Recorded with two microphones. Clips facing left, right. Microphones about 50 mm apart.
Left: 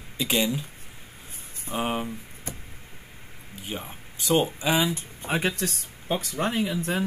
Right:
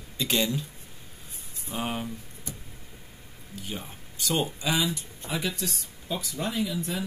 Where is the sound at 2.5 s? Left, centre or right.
Left.